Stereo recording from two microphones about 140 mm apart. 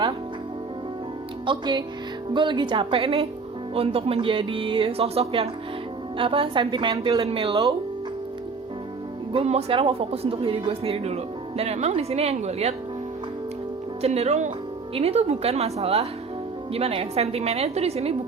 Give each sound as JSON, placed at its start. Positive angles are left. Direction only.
{"t": 1.5, "sound": "a woman's voice", "side_deg": -35}
{"t": 9.3, "sound": "speech", "side_deg": -45}
{"t": 14.0, "sound": "speech", "side_deg": -50}